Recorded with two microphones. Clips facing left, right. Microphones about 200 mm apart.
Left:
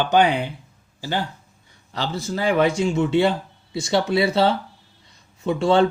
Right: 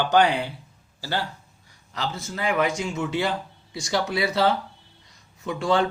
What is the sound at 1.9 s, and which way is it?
A man's voice, 30° left (ahead or behind).